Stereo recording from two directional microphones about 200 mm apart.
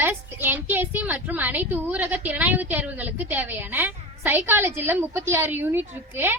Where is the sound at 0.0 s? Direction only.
10° right (ahead or behind).